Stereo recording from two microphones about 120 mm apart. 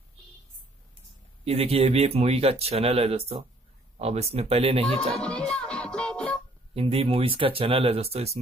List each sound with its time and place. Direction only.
1.4 s speech: 55° right (ahead or behind)
4.8 s music: 5° left (ahead or behind)
6.7 s speech: 55° right (ahead or behind)